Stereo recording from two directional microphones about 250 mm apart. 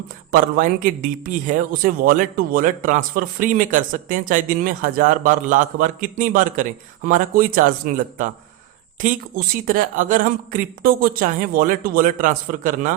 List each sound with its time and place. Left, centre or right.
0.3 s a man's voice: right